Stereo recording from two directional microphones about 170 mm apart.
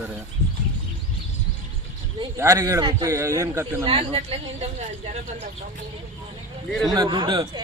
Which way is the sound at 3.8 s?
35° right (ahead or behind).